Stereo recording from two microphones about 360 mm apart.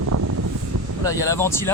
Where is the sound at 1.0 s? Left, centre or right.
Centre.